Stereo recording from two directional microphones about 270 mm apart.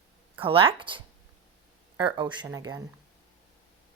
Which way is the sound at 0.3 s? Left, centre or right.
Centre.